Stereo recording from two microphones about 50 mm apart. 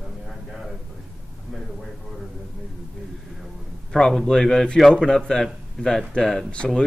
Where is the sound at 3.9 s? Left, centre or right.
Centre.